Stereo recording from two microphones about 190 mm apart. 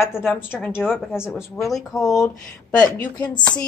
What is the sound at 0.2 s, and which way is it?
Speech, centre (ahead or behind).